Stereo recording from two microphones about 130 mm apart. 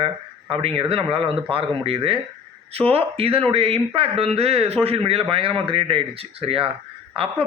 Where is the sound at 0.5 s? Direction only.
45° right (ahead or behind).